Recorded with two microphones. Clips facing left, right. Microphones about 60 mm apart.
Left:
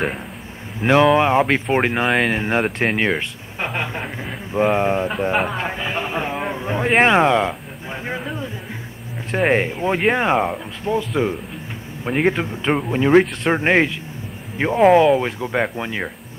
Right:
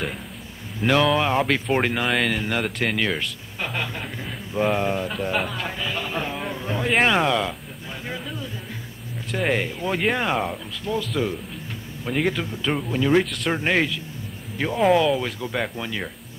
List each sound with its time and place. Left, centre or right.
0.7 s speech: left
7.0 s a sound: left
9.3 s speech: left